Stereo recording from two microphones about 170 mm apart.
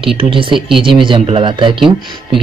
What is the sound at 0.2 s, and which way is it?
Speech, 30° right (ahead or behind).